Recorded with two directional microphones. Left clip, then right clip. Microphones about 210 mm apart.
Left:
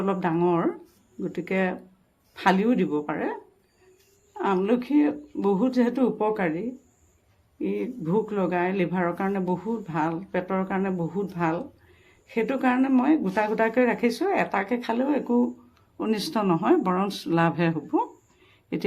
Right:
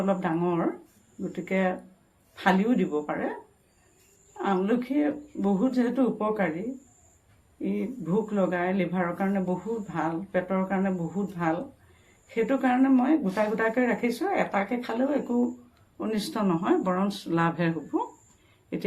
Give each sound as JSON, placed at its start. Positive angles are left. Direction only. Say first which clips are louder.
{"t": 0.0, "sound": "speech", "louder": "left 2 dB", "side_deg": 55}
{"t": 4.4, "sound": "speech", "louder": "left 3 dB", "side_deg": 55}
{"t": 7.6, "sound": "speech", "louder": "left 3 dB", "side_deg": 55}
{"t": 12.3, "sound": "speech", "louder": "left 1 dB", "side_deg": 55}